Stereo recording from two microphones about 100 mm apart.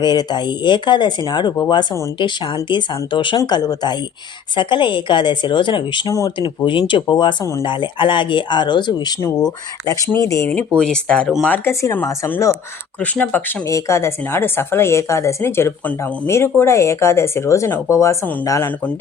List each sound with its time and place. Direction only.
0.0 s speech: 45° left (ahead or behind)
6.1 s speech: 35° left (ahead or behind)
6.7 s speech: 55° left (ahead or behind)
10.2 s speech: 30° left (ahead or behind)
10.8 s speech: 5° left (ahead or behind)
11.4 s speech: 20° left (ahead or behind)
13.0 s speech: 15° left (ahead or behind)
13.7 s speech: 30° left (ahead or behind)